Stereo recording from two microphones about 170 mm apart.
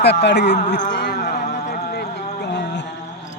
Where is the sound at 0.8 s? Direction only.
85° left.